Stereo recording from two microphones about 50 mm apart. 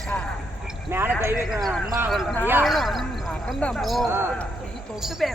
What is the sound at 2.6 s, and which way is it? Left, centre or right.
Speech, centre.